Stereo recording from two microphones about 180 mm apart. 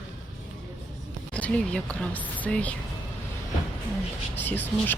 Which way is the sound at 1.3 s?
5° left (ahead or behind).